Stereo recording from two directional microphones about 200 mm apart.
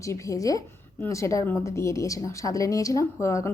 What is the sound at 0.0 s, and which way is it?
A woman's voice, 15° left (ahead or behind).